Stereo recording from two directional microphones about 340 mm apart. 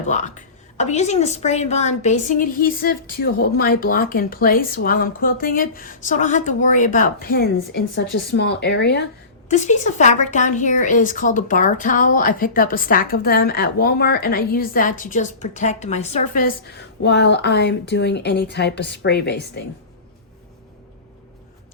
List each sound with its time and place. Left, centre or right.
0.8 s a woman's voice: centre